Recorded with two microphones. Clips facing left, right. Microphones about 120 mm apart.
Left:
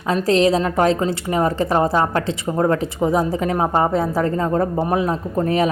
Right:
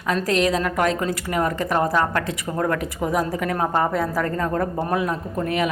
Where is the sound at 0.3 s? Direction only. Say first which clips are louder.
Left 6 dB; 30° left (ahead or behind).